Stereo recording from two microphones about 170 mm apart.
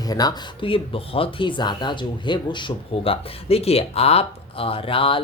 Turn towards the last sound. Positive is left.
turn(degrees=30)  # may be behind; listen again after turning